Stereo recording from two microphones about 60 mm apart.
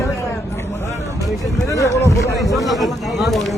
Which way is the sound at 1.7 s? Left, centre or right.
Left.